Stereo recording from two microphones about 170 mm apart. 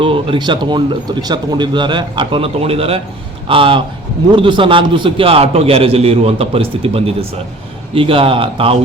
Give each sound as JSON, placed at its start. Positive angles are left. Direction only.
{"t": 0.0, "sound": "a man's voice", "side_deg": -30}